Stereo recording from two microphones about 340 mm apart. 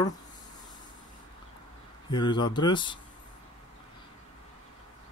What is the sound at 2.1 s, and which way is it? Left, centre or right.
Speech, centre.